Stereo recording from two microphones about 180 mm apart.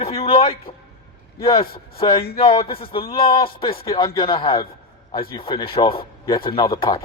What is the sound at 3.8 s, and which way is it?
A man's voice, 20° left (ahead or behind).